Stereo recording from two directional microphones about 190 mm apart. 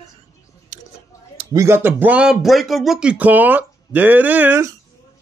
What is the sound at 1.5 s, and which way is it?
Speech, 15° right (ahead or behind).